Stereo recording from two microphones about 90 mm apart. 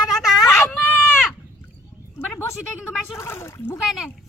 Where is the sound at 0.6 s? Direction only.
20° left (ahead or behind).